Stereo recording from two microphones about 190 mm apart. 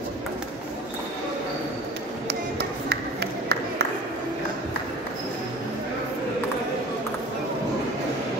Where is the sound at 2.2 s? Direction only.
60° right (ahead or behind).